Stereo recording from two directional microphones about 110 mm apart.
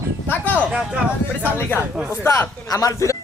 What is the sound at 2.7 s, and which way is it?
Speech, 30° left (ahead or behind).